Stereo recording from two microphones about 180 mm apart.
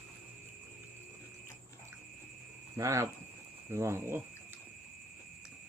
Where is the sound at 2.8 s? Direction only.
15° right (ahead or behind).